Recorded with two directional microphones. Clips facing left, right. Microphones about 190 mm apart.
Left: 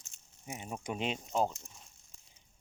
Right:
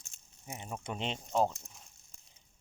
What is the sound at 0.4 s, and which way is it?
Speech, 15° left (ahead or behind).